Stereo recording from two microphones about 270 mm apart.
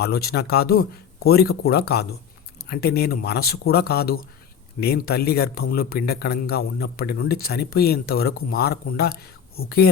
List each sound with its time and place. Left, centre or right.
0.0 s a man's voice: left